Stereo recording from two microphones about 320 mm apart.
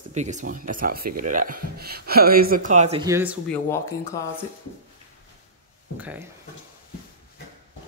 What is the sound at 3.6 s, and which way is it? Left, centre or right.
Speech, centre.